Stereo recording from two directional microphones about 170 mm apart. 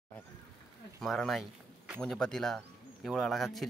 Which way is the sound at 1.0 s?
Centre (ahead or behind).